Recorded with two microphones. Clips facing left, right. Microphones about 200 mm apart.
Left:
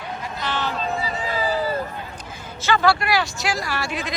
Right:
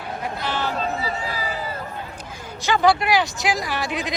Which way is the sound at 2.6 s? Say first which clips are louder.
Right 1 dB; 15° right (ahead or behind).